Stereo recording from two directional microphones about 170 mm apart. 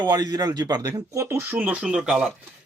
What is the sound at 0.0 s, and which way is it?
A man's voice, 25° right (ahead or behind).